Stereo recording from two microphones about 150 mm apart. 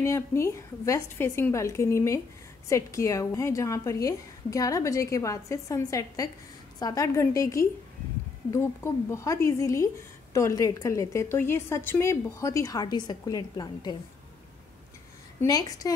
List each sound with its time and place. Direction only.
0.0 s a woman's voice: 20° left (ahead or behind)
15.4 s a woman's voice: 25° left (ahead or behind)